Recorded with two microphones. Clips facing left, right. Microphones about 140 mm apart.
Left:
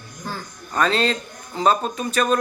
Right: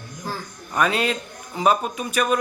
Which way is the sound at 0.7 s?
10° right (ahead or behind).